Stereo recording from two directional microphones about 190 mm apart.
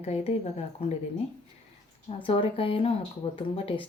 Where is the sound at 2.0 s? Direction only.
30° left (ahead or behind).